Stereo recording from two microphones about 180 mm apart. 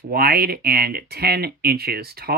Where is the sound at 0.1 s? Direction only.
55° right (ahead or behind).